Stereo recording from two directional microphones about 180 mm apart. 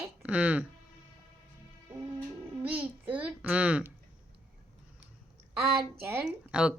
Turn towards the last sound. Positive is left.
turn(degrees=-5)  # may be behind; listen again after turning